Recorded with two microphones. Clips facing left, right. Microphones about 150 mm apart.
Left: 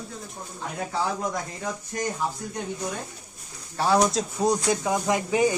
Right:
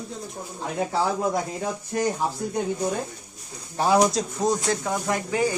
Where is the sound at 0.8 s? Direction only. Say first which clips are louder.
Right 4 dB; 30° right (ahead or behind).